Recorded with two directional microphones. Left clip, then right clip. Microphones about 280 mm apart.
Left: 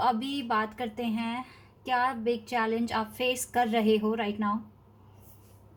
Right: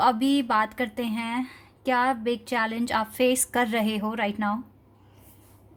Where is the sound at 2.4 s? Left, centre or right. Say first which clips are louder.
Right 2 dB; right.